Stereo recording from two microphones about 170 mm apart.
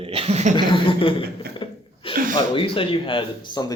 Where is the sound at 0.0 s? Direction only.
35° right (ahead or behind).